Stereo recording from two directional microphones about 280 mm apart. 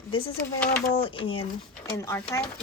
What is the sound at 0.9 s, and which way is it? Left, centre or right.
Speech, centre.